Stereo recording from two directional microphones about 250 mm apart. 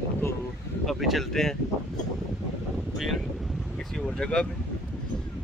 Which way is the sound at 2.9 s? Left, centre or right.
Centre.